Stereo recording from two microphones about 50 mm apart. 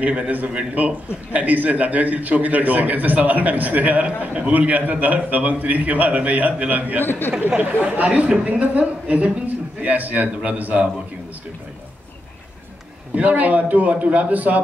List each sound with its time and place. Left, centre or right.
0.0 s a man's voice: right
7.1 s speech: left
7.3 s a man's voice: right
13.1 s a man's voice: right